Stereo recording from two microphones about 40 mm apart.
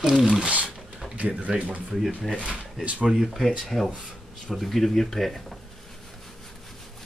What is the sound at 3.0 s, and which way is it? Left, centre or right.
Speech, centre.